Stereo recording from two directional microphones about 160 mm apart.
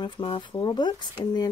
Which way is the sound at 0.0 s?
30° left (ahead or behind).